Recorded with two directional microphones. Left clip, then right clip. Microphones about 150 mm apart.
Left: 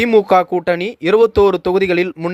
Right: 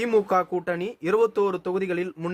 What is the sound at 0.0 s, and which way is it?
Speech, 30° left (ahead or behind).